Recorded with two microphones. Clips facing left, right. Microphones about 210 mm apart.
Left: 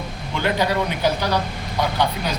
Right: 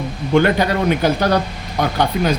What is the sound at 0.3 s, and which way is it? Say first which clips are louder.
Speech: right 6 dB; 55° right (ahead or behind).